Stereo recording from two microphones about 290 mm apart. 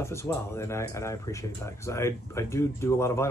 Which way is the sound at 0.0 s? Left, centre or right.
Centre.